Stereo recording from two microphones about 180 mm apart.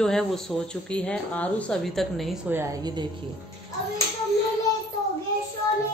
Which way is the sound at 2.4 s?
15° right (ahead or behind).